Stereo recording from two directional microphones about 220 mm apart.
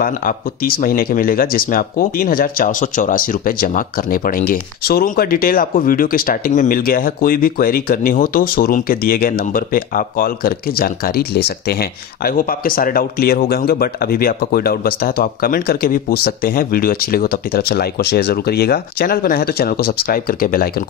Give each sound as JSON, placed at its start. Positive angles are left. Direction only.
{"t": 0.0, "sound": "speech", "side_deg": 40}